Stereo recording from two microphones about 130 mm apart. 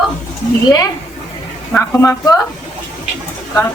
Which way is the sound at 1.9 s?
15° left (ahead or behind).